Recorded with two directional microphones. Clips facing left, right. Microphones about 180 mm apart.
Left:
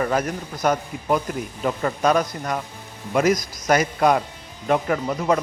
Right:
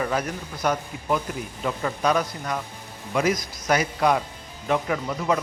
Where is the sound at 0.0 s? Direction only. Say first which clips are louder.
Left 4 dB; 45° left (ahead or behind).